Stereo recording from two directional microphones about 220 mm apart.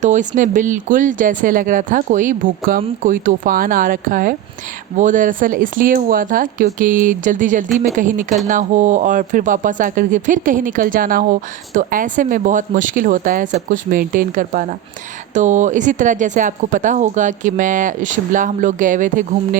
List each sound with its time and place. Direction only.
0.0 s speech: 35° right (ahead or behind)